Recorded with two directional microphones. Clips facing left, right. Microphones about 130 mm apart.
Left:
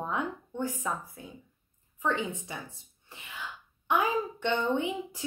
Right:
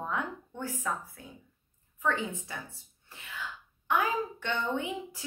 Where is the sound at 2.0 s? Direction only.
20° left (ahead or behind).